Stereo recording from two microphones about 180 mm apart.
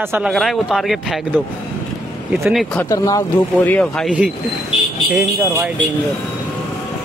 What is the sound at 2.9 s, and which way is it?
Speech, 20° left (ahead or behind).